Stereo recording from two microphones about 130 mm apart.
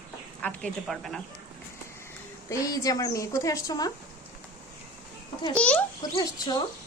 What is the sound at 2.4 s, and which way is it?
A woman's voice, 25° left (ahead or behind).